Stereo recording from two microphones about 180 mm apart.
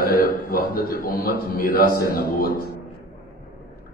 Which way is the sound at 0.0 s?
55° left (ahead or behind).